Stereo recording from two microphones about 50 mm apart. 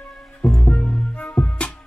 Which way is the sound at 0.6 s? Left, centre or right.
Left.